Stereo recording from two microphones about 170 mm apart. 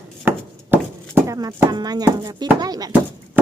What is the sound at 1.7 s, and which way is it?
Speech, 25° right (ahead or behind).